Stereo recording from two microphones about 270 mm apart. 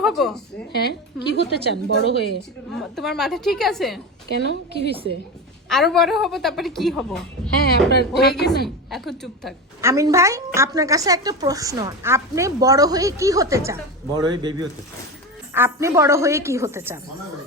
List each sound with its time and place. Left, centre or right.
0.0 s a woman's voice: centre
0.7 s a woman's voice: left
2.7 s a woman's voice: centre
4.4 s a woman's voice: left
5.6 s a woman's voice: centre
7.9 s a woman's voice: left
8.6 s a woman's voice: centre
9.8 s a woman's voice: centre